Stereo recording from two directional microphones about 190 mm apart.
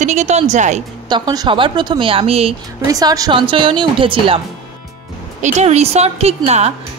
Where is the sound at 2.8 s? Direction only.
20° right (ahead or behind).